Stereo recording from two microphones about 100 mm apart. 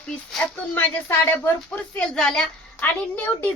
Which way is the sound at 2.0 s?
5° left (ahead or behind).